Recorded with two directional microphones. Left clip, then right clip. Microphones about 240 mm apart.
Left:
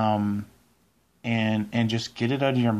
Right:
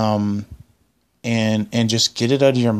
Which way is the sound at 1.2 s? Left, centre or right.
Right.